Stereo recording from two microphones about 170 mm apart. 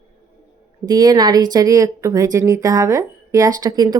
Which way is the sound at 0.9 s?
20° right (ahead or behind).